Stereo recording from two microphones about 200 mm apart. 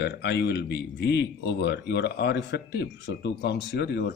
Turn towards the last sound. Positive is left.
turn(degrees=55)  # may be behind; listen again after turning